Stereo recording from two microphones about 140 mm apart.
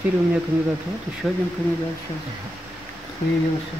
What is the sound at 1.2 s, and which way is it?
Speech, centre (ahead or behind).